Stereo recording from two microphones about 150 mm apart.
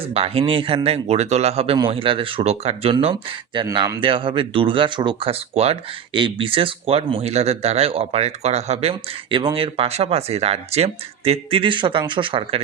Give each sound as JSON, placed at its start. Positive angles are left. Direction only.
{"t": 0.0, "sound": "speech", "side_deg": -40}